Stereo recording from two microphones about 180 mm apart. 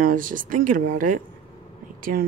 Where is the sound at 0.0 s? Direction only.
50° right (ahead or behind).